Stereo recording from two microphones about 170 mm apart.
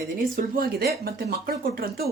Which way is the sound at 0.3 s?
60° right (ahead or behind).